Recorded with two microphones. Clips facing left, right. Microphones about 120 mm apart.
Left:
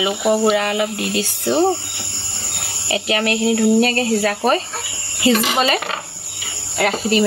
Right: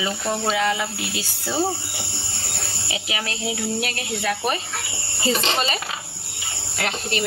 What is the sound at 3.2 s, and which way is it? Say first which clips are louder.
Speech: left 14 dB; 65° left (ahead or behind).